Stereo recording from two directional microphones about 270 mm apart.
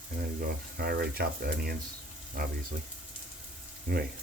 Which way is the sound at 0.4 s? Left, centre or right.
Right.